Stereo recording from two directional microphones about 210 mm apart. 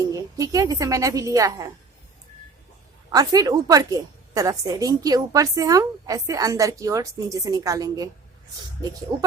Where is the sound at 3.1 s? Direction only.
15° right (ahead or behind).